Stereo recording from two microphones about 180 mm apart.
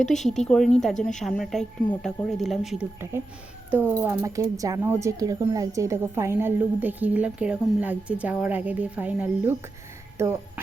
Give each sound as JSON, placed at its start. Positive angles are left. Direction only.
{"t": 0.1, "sound": "a woman's voice", "side_deg": 0}